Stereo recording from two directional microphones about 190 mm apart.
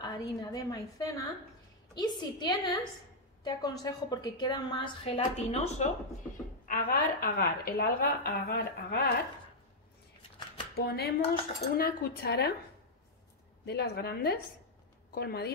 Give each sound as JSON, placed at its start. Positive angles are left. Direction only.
{"t": 0.0, "sound": "a woman's voice", "side_deg": 20}
{"t": 6.7, "sound": "a woman's voice", "side_deg": 50}
{"t": 10.7, "sound": "a woman's voice", "side_deg": 55}
{"t": 13.7, "sound": "a woman's voice", "side_deg": 55}